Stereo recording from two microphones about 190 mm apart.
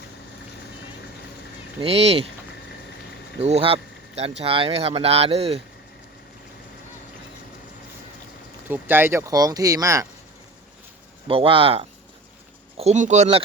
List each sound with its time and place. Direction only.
1.8 s speech: 30° right (ahead or behind)
3.4 s speech: 30° right (ahead or behind)
8.6 s speech: 10° right (ahead or behind)
11.3 s speech: 30° right (ahead or behind)